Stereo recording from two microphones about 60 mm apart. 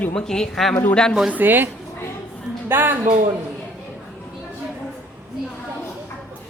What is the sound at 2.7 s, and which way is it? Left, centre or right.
Speech, right.